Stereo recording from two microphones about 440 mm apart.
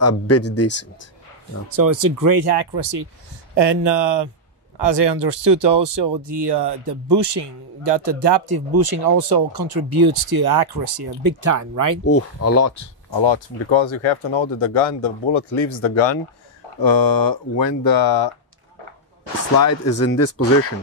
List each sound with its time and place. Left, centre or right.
0.0 s speech: left
1.7 s speech: right
12.0 s speech: left
13.1 s speech: left
16.8 s speech: left
19.5 s speech: left